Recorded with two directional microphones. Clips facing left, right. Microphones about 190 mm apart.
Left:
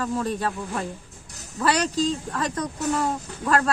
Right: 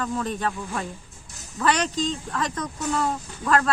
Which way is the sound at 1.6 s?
35° left (ahead or behind).